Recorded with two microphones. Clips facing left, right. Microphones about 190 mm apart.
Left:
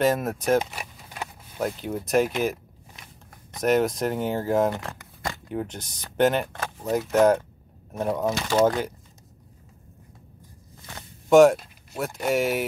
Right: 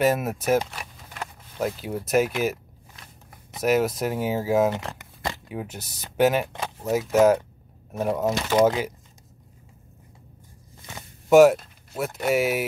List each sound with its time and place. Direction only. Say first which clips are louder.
0.0 s speech: even; 5° right (ahead or behind)
3.5 s speech: even; 5° right (ahead or behind)
4.7 s a sound: right 2 dB; 25° right (ahead or behind)
5.5 s speech: left 3 dB; 5° right (ahead or behind)
11.0 s zipper: right 1 dB; 5° right (ahead or behind)
11.5 s speech: right 1 dB; centre (ahead or behind)